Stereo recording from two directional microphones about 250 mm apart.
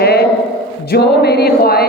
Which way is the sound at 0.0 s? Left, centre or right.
Left.